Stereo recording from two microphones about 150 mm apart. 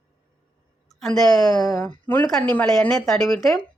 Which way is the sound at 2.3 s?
10° left (ahead or behind).